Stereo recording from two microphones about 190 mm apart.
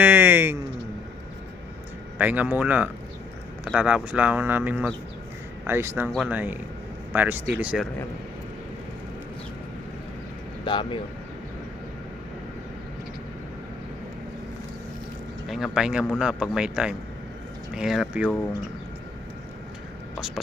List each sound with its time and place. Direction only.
0.0 s speech: 10° right (ahead or behind)
2.1 s speech: 10° right (ahead or behind)
10.7 s speech: 25° left (ahead or behind)
15.4 s speech: centre (ahead or behind)